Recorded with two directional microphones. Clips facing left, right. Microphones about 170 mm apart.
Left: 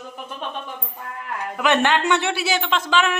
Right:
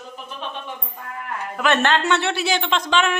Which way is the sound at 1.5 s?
15° left (ahead or behind).